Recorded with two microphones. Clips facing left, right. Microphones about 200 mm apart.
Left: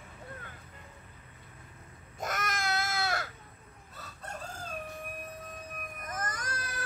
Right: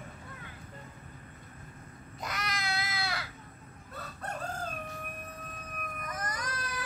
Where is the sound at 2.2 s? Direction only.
50° left (ahead or behind).